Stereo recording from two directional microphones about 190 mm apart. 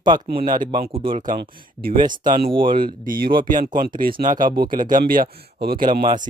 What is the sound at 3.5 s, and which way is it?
Speech, 45° right (ahead or behind).